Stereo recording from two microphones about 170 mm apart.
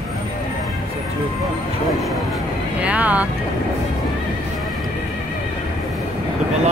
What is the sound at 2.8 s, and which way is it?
Speech, 10° right (ahead or behind).